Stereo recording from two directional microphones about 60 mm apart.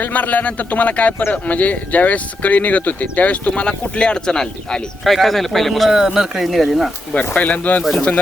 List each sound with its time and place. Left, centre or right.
0.0 s speech: left; by 5.9 s centre
5.9 s speech: centre
7.3 s speech: left